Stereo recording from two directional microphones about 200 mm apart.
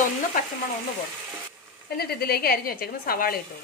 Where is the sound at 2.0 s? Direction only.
50° left (ahead or behind).